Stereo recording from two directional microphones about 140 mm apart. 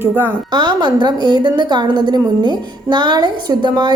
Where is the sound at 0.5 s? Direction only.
30° right (ahead or behind).